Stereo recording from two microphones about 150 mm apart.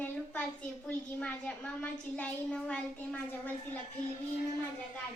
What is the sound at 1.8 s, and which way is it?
Speech, 10° left (ahead or behind).